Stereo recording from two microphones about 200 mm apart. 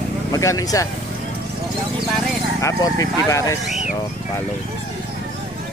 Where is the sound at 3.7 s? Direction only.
Centre (ahead or behind).